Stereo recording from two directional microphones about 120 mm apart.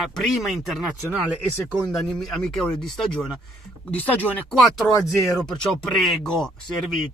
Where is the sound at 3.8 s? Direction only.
15° left (ahead or behind).